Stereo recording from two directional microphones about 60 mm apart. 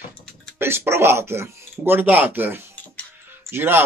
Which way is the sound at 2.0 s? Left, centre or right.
Right.